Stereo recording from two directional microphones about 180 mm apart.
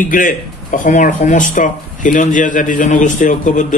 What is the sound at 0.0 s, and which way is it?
A man's voice, 45° left (ahead or behind).